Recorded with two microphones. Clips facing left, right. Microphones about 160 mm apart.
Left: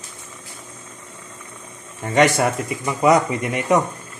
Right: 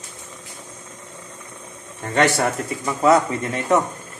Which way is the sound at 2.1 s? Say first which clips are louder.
Left 2 dB; 10° left (ahead or behind).